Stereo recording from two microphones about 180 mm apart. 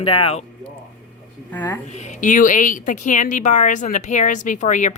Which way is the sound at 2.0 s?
45° left (ahead or behind).